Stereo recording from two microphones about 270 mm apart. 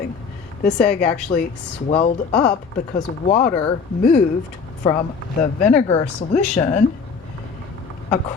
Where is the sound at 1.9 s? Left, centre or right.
Left.